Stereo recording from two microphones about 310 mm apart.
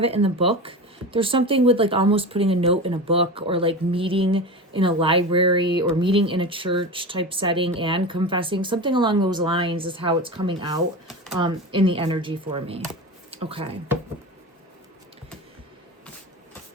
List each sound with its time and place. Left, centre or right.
0.0 s speech: centre